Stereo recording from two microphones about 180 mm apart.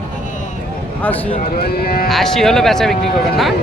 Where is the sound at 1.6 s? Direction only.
60° left (ahead or behind).